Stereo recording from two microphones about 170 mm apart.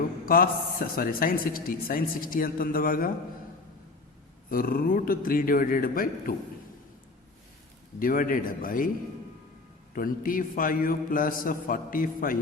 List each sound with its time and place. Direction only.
0.3 s speech: 60° left (ahead or behind)
4.4 s speech: 60° left (ahead or behind)
7.9 s a man's voice: 55° left (ahead or behind)
9.9 s speech: 55° left (ahead or behind)